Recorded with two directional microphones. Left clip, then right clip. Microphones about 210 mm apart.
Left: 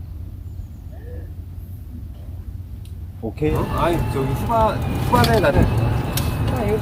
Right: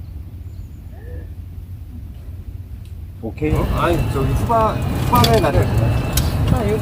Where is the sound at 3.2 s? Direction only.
40° left (ahead or behind).